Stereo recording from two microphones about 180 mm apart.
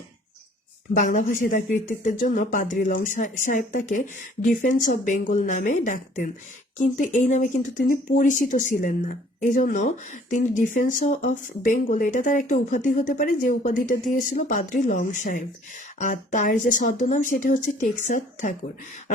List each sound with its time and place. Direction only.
0.9 s speech: 45° left (ahead or behind)